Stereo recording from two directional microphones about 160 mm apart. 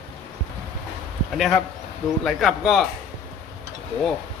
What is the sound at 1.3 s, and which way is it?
Speech, centre (ahead or behind).